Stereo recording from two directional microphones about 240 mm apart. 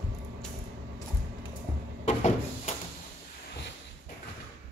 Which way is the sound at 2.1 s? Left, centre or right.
Left.